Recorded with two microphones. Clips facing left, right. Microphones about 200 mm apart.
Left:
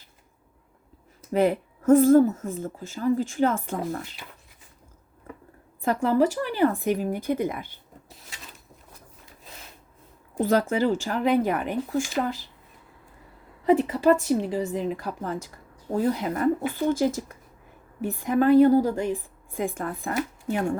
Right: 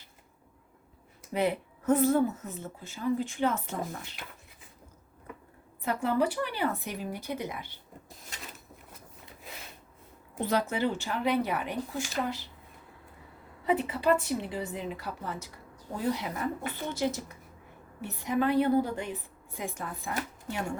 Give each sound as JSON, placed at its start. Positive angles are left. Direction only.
{"t": 1.3, "sound": "a woman's voice", "side_deg": 45}
{"t": 5.8, "sound": "a woman's voice", "side_deg": 45}
{"t": 10.3, "sound": "a woman's voice", "side_deg": 50}
{"t": 13.7, "sound": "a woman's voice", "side_deg": 45}
{"t": 18.0, "sound": "a woman's voice", "side_deg": 50}